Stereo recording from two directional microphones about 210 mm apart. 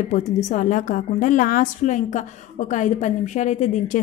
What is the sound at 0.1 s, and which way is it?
A woman's voice, 35° left (ahead or behind).